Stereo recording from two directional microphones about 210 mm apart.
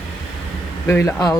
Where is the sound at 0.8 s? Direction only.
10° left (ahead or behind).